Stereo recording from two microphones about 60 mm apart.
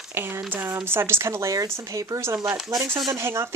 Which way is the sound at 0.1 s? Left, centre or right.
Right.